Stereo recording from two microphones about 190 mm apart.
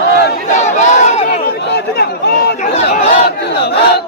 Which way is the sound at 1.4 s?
60° left (ahead or behind).